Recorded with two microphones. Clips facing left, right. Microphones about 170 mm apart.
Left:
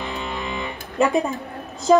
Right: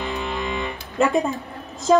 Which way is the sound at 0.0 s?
Centre (ahead or behind).